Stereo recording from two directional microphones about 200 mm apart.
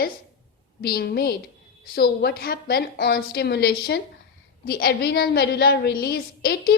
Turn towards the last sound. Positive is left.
turn(degrees=50)  # may be behind; listen again after turning